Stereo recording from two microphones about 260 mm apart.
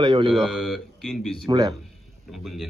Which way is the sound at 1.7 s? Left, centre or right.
Centre.